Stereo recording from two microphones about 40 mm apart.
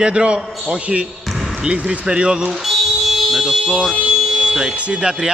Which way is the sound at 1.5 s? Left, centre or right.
Right.